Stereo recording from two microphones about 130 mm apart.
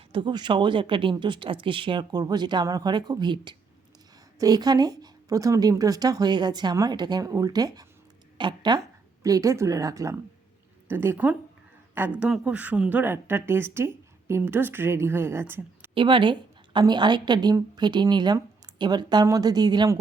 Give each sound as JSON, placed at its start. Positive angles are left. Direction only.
{"t": 0.1, "sound": "speech", "side_deg": -35}
{"t": 9.2, "sound": "a woman's voice", "side_deg": -25}
{"t": 16.0, "sound": "speech", "side_deg": -40}